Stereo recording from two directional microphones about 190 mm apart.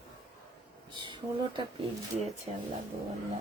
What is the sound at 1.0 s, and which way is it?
Speech, 25° right (ahead or behind).